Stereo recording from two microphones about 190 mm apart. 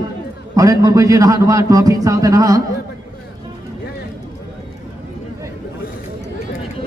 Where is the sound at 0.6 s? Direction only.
20° right (ahead or behind).